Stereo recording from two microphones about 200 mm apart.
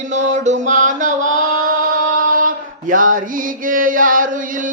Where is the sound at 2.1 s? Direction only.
45° right (ahead or behind).